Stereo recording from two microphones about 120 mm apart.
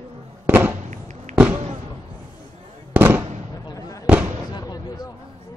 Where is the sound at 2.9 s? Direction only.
15° right (ahead or behind).